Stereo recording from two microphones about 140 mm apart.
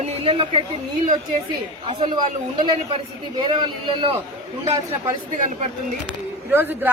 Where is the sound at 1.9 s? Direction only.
45° right (ahead or behind).